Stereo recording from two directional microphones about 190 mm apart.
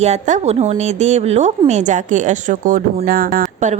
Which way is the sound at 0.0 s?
40° right (ahead or behind).